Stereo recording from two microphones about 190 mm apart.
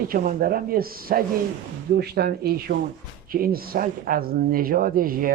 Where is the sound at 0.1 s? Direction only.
50° right (ahead or behind).